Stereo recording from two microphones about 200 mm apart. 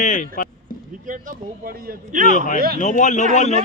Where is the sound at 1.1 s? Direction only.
45° right (ahead or behind).